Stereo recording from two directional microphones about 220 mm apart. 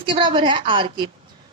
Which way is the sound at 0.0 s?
20° right (ahead or behind).